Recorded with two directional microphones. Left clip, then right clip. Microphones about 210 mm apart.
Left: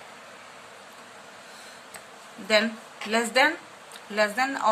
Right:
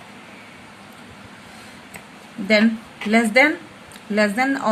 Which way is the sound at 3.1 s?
20° right (ahead or behind).